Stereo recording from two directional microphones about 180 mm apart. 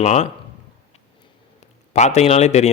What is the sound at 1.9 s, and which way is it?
Speech, 40° left (ahead or behind).